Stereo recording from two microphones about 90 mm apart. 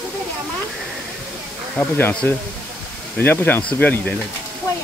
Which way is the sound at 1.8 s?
25° left (ahead or behind).